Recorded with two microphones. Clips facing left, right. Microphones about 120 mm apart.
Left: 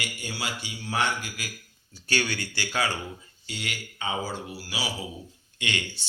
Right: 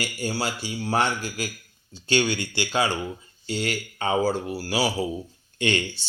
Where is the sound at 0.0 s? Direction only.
35° right (ahead or behind).